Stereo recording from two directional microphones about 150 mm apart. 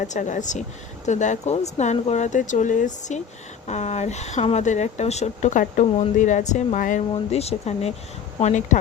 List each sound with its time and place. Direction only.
0.0 s speech: 55° left (ahead or behind)
7.1 s speech: 45° left (ahead or behind)